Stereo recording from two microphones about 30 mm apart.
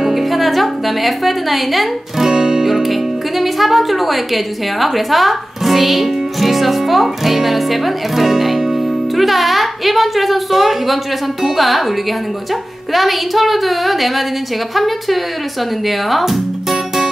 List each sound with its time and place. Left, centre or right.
0.0 s music: centre
2.1 s music: centre
2.6 s a woman's voice: centre
12.9 s a woman's voice: centre